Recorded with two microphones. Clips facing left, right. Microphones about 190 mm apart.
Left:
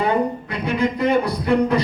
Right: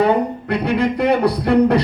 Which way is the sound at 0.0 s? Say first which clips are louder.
Right 4 dB; 65° right (ahead or behind).